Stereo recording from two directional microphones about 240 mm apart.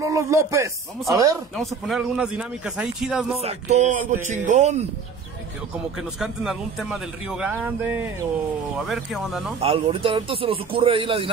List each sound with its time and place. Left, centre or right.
0.0 s a man's voice: centre
1.6 s a man's voice: centre
3.3 s speech: right
6.1 s a man's voice: centre
9.6 s speech: right